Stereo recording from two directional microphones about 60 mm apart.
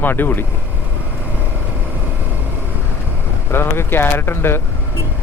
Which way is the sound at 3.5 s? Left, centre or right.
Left.